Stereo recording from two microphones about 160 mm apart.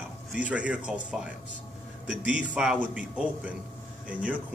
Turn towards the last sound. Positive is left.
turn(degrees=-10)  # may be behind; listen again after turning